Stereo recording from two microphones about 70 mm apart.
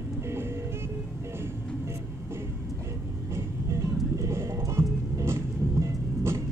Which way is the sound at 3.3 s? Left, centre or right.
Right.